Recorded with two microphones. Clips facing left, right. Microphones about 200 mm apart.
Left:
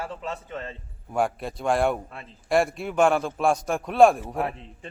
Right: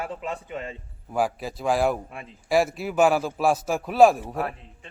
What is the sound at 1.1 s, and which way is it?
Speech, centre (ahead or behind).